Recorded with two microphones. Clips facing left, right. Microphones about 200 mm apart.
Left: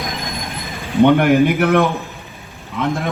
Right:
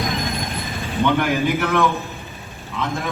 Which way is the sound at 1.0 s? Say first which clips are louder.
Left 7 dB; 50° left (ahead or behind).